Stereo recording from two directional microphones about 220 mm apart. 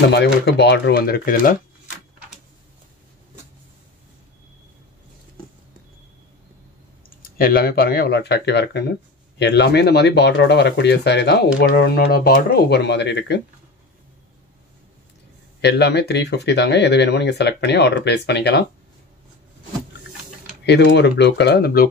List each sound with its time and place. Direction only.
0.1 s speech: 50° left (ahead or behind)
7.2 s speech: 40° left (ahead or behind)
15.6 s speech: 50° left (ahead or behind)
20.6 s speech: 50° left (ahead or behind)